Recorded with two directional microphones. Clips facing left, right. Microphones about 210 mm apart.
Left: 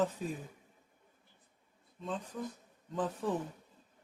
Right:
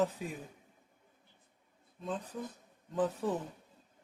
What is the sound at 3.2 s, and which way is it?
Speech, 10° right (ahead or behind).